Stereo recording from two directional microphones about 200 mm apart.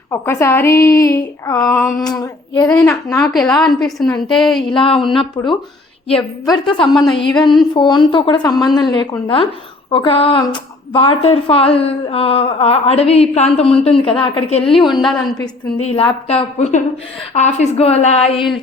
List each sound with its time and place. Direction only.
0.1 s a woman's voice: 15° left (ahead or behind)
4.7 s a woman's voice: 25° left (ahead or behind)
15.8 s a woman's voice: 30° left (ahead or behind)